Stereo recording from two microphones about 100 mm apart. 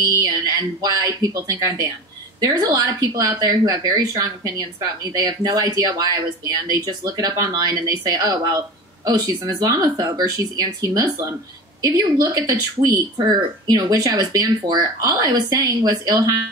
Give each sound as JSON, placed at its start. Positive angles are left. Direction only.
{"t": 0.0, "sound": "speech", "side_deg": -40}